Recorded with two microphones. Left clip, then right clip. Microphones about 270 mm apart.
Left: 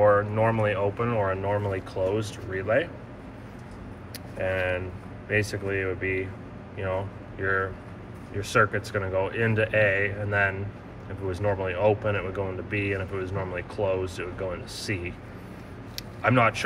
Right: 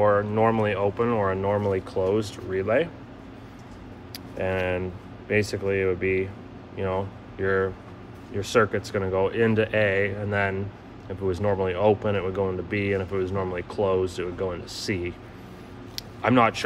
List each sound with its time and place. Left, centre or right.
0.0 s speech: right
4.4 s speech: right